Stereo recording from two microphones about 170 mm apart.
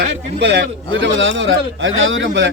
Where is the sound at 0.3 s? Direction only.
90° right.